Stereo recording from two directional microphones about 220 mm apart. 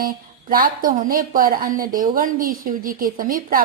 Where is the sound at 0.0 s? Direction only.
40° right (ahead or behind).